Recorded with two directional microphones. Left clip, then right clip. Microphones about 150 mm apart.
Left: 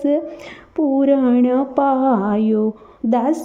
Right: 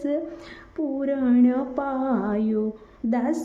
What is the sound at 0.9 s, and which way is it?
Mantra, 45° left (ahead or behind).